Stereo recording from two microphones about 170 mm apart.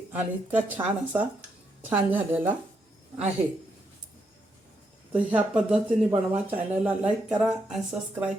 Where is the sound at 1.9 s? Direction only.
10° right (ahead or behind).